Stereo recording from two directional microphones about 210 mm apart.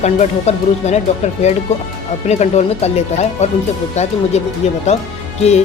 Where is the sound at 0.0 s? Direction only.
35° left (ahead or behind).